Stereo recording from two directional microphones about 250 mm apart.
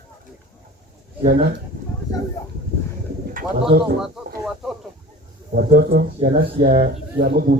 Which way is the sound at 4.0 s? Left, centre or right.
Centre.